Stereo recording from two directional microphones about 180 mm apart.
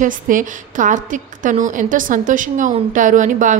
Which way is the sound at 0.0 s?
45° right (ahead or behind).